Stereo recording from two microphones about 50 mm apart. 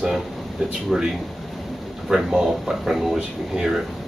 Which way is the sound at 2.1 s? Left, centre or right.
Centre.